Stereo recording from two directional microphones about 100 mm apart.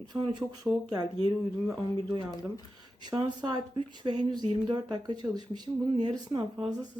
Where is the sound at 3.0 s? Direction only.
45° right (ahead or behind).